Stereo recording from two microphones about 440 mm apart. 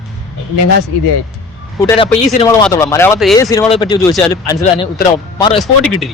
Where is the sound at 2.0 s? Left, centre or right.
Centre.